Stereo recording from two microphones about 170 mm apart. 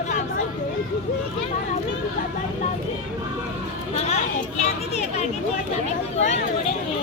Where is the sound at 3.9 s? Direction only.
40° left (ahead or behind).